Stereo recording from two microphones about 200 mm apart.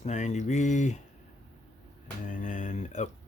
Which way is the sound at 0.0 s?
35° left (ahead or behind).